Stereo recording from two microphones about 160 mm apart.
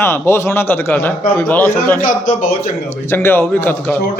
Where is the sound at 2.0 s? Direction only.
55° left (ahead or behind).